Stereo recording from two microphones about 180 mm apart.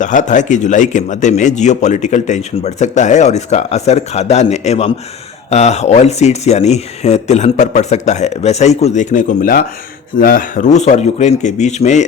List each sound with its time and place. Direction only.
0.0 s a man's voice: 45° left (ahead or behind)